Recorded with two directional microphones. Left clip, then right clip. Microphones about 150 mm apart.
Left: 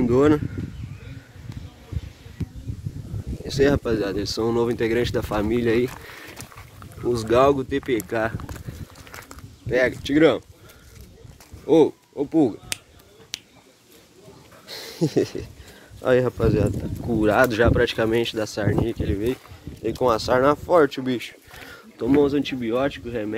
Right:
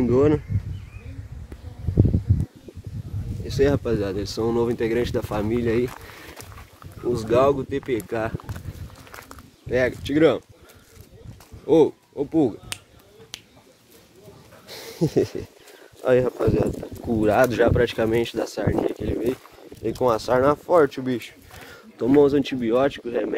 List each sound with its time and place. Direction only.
0.0 s speech: 5° right (ahead or behind)
3.4 s speech: centre (ahead or behind)
11.6 s speech: 10° right (ahead or behind)
14.7 s a sound: 10° right (ahead or behind)
16.0 s speech: centre (ahead or behind)
21.9 s speech: 25° right (ahead or behind)
22.2 s speech: 50° right (ahead or behind)